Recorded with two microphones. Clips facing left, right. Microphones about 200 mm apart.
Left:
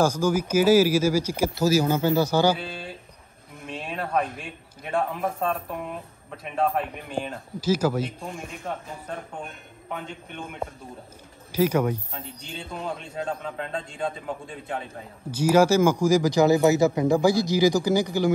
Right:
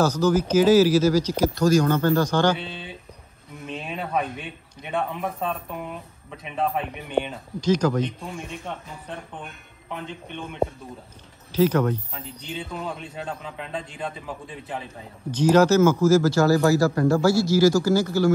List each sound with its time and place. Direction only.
0.0 s a man's voice: 10° left (ahead or behind)
9.8 s a man's voice: 5° left (ahead or behind)
12.4 s a man's voice: centre (ahead or behind)
15.3 s speech: 10° left (ahead or behind)